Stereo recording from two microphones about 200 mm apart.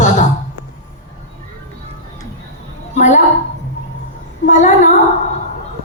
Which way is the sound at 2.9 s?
35° left (ahead or behind).